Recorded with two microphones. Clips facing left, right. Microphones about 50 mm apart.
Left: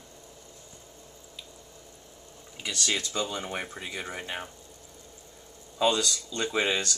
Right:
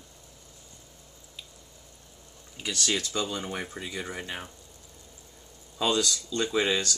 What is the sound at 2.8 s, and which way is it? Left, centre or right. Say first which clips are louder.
Speech: even; centre.